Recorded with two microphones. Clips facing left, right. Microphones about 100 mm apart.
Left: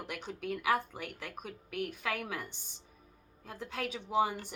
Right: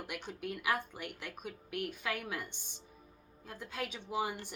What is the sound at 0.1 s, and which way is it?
Speech, 40° left (ahead or behind).